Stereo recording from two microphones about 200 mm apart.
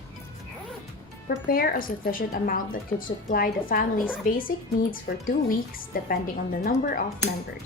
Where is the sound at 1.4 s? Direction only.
45° left (ahead or behind).